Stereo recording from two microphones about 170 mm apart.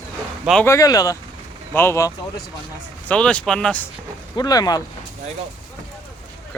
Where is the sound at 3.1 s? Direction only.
5° left (ahead or behind).